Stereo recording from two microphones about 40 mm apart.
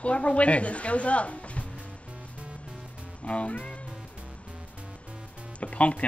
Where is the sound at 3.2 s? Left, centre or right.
Left.